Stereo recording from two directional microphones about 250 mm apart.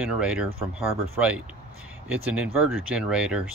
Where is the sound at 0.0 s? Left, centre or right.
Centre.